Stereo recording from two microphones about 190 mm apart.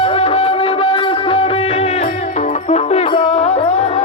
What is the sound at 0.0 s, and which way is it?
Music, 30° left (ahead or behind).